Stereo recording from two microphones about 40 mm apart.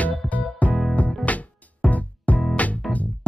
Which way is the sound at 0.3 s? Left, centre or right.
Left.